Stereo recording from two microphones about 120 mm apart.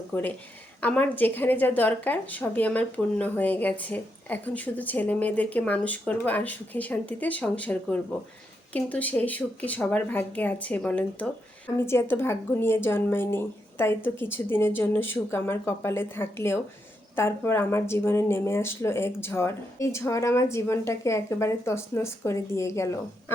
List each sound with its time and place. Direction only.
0.1 s a woman's voice: 15° left (ahead or behind)